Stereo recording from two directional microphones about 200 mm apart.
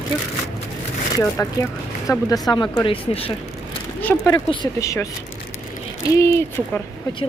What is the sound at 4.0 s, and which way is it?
Speech, 10° left (ahead or behind).